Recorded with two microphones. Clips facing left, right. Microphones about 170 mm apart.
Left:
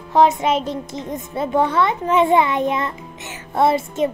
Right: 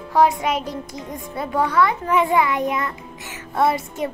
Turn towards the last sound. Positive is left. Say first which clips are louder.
# left 3 dB
turn(degrees=25)  # may be behind; listen again after turning